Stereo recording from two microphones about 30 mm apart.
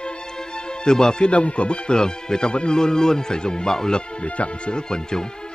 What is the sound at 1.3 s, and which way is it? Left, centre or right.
Speech, left.